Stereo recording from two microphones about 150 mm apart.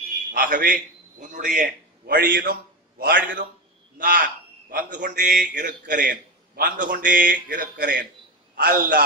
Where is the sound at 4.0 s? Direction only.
70° right (ahead or behind).